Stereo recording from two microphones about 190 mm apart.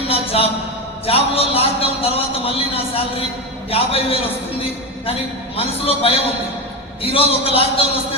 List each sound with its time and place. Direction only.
0.1 s a sound: 30° left (ahead or behind)
1.0 s a man's voice: 30° left (ahead or behind)
5.5 s a man's voice: 30° left (ahead or behind)